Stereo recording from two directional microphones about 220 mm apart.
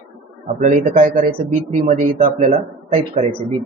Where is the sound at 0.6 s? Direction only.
35° right (ahead or behind).